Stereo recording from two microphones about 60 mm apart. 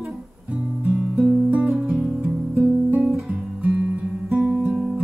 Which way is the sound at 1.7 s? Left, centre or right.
Centre.